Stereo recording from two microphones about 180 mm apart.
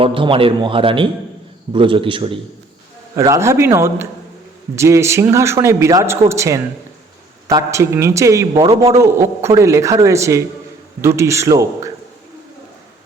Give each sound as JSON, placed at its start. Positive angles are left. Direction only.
{"t": 0.0, "sound": "a man's voice", "side_deg": -30}
{"t": 3.2, "sound": "speech", "side_deg": -15}
{"t": 8.6, "sound": "a man's voice", "side_deg": -30}
{"t": 8.9, "sound": "speech", "side_deg": -15}